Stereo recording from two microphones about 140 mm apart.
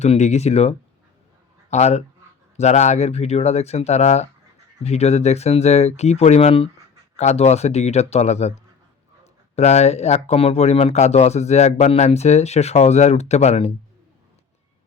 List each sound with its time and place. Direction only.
0.0 s speech: 55° left (ahead or behind)
1.7 s speech: 55° left (ahead or behind)